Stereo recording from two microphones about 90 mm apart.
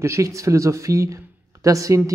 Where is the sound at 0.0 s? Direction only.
35° right (ahead or behind).